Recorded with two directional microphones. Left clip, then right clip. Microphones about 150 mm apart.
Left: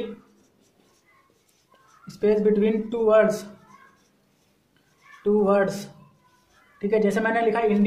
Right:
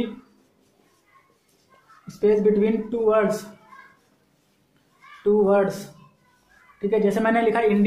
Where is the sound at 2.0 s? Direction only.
30° right (ahead or behind).